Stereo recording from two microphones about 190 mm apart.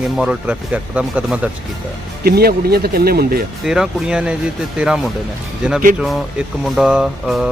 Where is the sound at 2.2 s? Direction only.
55° right (ahead or behind).